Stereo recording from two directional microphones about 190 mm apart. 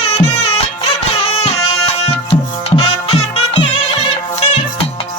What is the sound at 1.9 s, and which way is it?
Music, 30° left (ahead or behind).